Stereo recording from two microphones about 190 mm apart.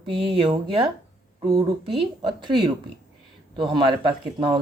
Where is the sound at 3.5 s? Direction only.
25° right (ahead or behind).